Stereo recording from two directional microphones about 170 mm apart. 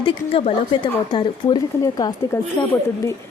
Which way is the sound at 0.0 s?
30° left (ahead or behind).